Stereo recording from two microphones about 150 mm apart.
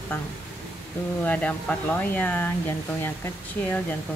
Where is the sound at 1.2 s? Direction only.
10° left (ahead or behind).